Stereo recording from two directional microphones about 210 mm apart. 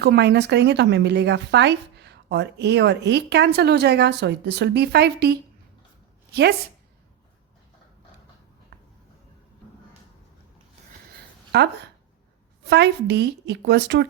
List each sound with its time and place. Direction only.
0.0 s a woman's voice: 55° right (ahead or behind)
8.7 s a sound: 50° right (ahead or behind)
11.5 s a woman's voice: 50° right (ahead or behind)